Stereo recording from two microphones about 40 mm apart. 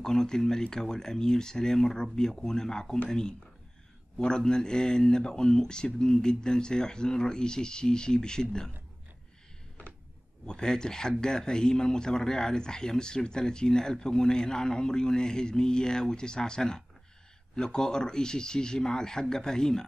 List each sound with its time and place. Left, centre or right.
0.0 s speech: centre
4.5 s speech: centre
10.4 s speech: centre